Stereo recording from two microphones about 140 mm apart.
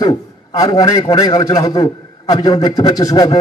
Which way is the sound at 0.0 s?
30° left (ahead or behind).